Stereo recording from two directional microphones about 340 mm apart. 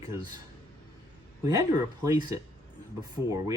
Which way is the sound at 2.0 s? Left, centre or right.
Centre.